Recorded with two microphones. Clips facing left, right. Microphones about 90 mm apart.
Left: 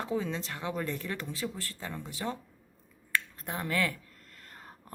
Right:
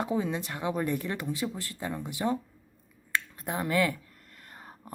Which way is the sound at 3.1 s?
15° right (ahead or behind).